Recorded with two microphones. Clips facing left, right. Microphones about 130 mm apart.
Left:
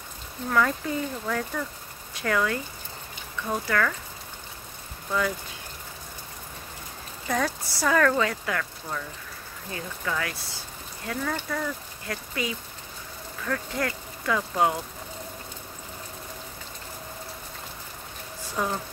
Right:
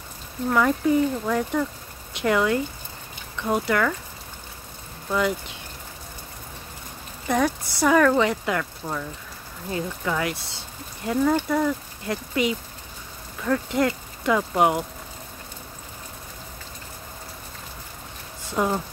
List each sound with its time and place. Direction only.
0.5 s speech: 15° right (ahead or behind)
7.2 s speech: 15° right (ahead or behind)
18.6 s speech: 20° right (ahead or behind)